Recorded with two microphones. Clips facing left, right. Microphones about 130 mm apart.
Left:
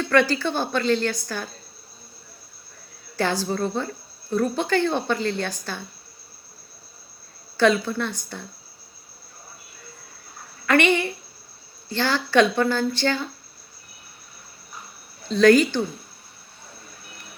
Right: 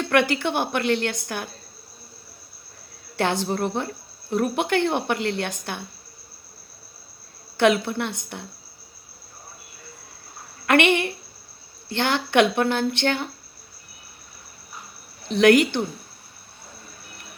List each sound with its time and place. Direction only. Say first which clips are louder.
0.0 s a sound: left 1 dB; 20° right (ahead or behind)
0.3 s speech: even; 20° right (ahead or behind)
3.2 s speech: even; 20° right (ahead or behind)
7.5 s speech: even; 20° right (ahead or behind)
10.7 s speech: even; 20° right (ahead or behind)
15.3 s speech: left 1 dB; 20° right (ahead or behind)